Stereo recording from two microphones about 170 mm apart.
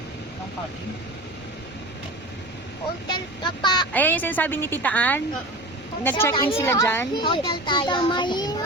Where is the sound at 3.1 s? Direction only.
25° left (ahead or behind).